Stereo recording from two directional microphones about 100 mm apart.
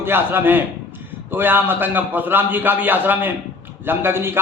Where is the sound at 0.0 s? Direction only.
20° right (ahead or behind).